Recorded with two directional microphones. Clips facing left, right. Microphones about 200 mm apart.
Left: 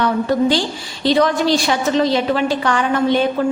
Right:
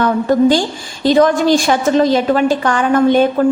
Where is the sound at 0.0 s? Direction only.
45° right (ahead or behind).